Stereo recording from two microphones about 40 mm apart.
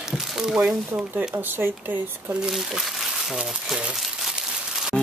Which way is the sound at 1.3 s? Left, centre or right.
Right.